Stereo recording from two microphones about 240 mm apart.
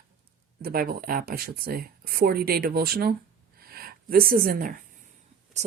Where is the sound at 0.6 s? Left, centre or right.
Right.